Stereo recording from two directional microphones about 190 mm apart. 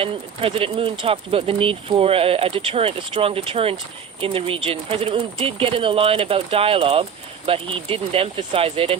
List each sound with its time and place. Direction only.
0.0 s speech: 30° right (ahead or behind)